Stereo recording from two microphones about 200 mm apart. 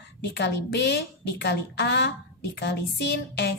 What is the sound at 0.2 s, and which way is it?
A woman's voice, 60° left (ahead or behind).